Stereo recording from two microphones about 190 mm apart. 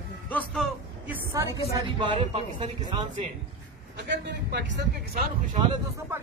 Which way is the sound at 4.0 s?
65° right (ahead or behind).